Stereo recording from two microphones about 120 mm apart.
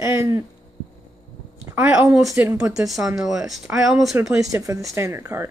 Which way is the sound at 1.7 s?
15° right (ahead or behind).